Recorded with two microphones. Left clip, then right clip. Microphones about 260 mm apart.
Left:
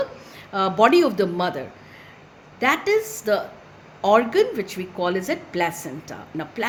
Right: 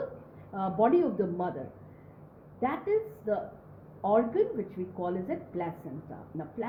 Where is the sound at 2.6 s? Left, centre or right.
Left.